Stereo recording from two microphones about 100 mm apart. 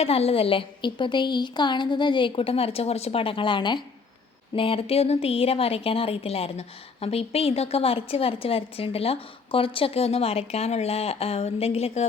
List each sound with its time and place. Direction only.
0.0 s a woman's voice: 90° left; by 0.6 s 75° left (ahead or behind)
0.8 s a woman's voice: 55° left (ahead or behind)
4.5 s a woman's voice: 65° left (ahead or behind); by 12.0 s 90° left